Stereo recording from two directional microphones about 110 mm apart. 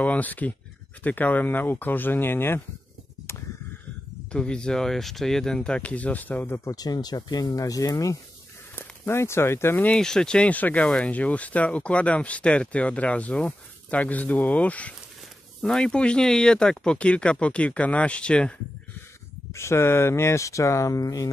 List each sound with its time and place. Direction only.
0.0 s speech: 15° left (ahead or behind)
4.3 s speech: 10° left (ahead or behind)
6.7 s speech: 35° left (ahead or behind)
9.8 s speech: 5° left (ahead or behind)
19.5 s speech: 25° left (ahead or behind)